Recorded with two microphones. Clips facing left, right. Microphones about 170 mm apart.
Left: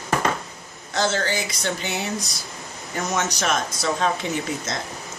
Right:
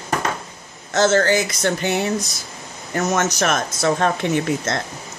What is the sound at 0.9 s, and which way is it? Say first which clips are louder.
Speech: right 7 dB; 50° right (ahead or behind).